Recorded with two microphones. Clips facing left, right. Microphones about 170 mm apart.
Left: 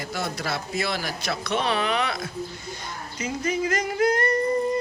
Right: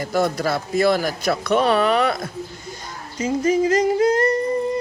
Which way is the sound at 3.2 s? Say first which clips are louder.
Right 8 dB; 35° right (ahead or behind).